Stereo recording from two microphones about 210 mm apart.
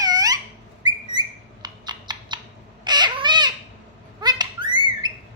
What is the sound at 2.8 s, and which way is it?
Cat, 20° right (ahead or behind).